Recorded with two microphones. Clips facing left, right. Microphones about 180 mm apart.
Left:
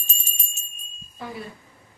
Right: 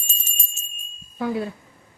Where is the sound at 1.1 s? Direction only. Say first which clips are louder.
Right 10 dB; 70° right (ahead or behind).